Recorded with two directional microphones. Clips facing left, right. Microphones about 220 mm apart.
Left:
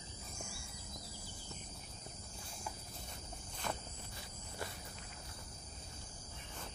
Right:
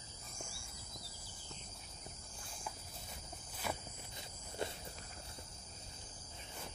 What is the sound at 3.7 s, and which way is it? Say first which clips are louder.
Walk: even; 10° right (ahead or behind).